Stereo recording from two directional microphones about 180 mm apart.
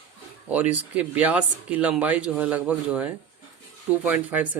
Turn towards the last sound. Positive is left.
turn(degrees=-10)  # may be behind; listen again after turning